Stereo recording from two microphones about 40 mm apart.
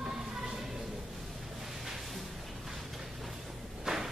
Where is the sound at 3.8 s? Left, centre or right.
Centre.